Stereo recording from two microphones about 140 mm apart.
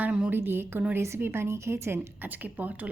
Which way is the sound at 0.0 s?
10° right (ahead or behind).